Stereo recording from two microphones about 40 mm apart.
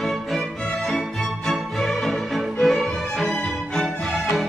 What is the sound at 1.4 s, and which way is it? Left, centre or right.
Music, centre.